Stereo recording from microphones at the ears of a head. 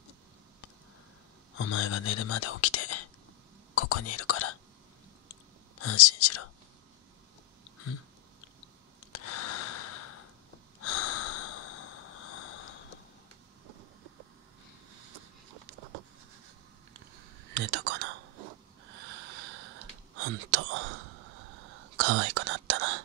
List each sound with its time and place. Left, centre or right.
1.5 s speech: left
5.3 s whispering: left
9.1 s breathing: left
10.8 s snort: left
13.7 s vehicle: right
15.0 s a sound: right
17.5 s whispering: right